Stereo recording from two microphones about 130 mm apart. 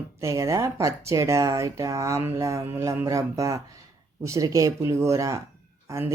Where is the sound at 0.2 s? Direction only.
25° right (ahead or behind).